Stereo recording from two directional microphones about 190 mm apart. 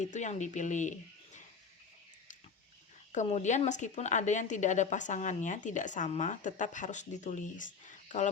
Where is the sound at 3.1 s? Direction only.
40° left (ahead or behind).